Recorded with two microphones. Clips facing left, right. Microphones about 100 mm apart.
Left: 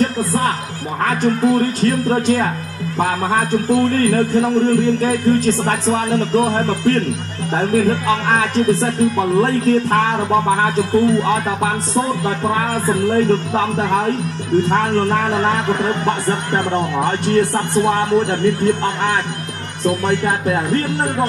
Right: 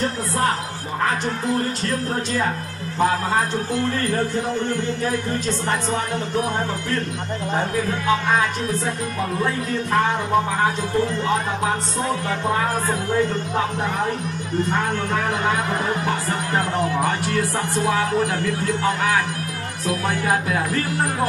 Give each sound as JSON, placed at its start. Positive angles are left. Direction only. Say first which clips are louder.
{"t": 9.4, "sound": "music", "louder": "left 10 dB", "side_deg": 75}
{"t": 14.7, "sound": "a man's voice", "louder": "left 7 dB", "side_deg": 45}